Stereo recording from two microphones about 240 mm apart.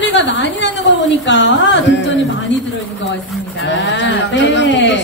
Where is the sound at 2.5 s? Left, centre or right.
Left.